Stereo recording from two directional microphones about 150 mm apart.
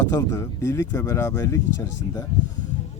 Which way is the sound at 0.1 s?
20° left (ahead or behind).